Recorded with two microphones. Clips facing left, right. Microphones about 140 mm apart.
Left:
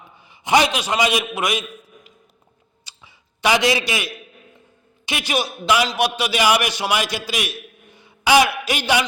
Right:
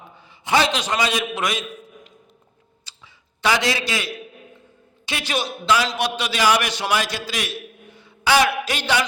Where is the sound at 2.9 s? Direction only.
15° left (ahead or behind).